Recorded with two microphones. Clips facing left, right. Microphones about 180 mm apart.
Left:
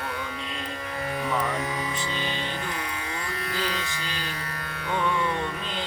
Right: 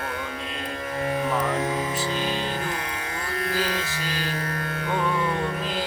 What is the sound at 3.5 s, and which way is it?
Music, 45° right (ahead or behind).